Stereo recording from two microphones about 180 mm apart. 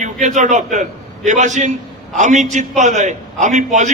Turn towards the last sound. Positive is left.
turn(degrees=-40)  # may be behind; listen again after turning